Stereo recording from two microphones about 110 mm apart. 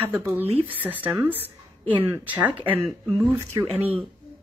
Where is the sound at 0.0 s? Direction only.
15° right (ahead or behind).